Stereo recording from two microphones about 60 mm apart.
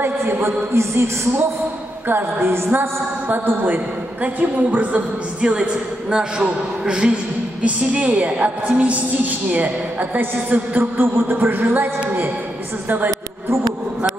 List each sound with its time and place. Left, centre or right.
0.0 s a woman's voice: right
2.0 s a woman's voice: right
3.3 s a woman's voice: right
5.4 s a man's voice: centre; by 11.9 s right